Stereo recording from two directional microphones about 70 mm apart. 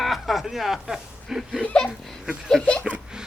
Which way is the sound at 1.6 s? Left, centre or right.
Centre.